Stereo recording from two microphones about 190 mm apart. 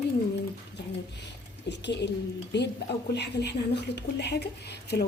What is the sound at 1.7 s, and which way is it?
Speech, 65° left (ahead or behind).